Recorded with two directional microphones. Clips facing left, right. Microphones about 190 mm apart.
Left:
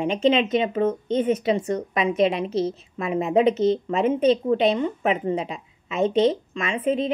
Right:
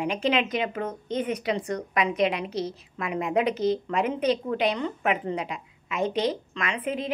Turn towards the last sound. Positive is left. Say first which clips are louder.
# left 6 dB
turn(degrees=25)  # may be behind; listen again after turning